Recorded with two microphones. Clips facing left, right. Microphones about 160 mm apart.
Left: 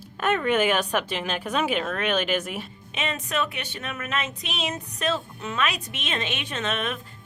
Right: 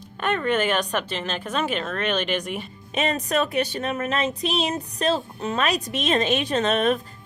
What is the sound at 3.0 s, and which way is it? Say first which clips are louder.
Speech: right 5 dB; 40° right (ahead or behind).